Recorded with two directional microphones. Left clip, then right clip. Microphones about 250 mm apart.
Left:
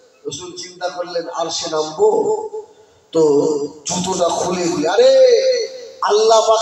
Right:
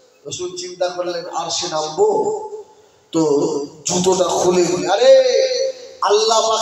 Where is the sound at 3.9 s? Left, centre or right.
Right.